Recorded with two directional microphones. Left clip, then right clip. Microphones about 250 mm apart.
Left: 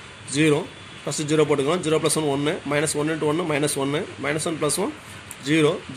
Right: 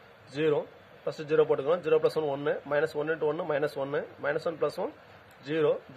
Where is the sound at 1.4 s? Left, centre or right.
Right.